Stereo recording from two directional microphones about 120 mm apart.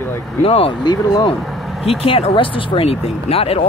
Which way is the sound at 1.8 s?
55° left (ahead or behind).